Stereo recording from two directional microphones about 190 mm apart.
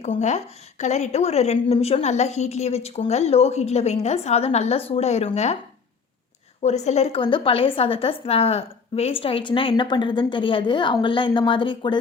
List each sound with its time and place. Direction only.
0.0 s a woman's voice: 35° left (ahead or behind)
6.6 s a woman's voice: 35° left (ahead or behind)